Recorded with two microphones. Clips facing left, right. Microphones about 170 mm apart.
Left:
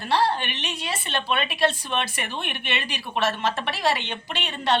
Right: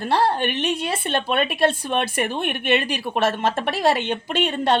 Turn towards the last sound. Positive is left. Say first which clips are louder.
# right 5 dB
turn(degrees=-50)  # may be behind; listen again after turning